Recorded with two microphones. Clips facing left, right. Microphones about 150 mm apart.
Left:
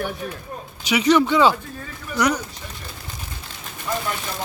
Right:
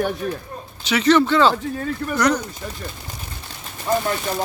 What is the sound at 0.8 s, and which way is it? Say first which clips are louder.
Speech: right 1 dB; 10° left (ahead or behind).